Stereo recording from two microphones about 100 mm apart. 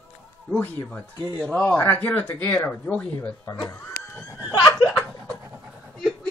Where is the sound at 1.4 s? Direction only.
15° left (ahead or behind).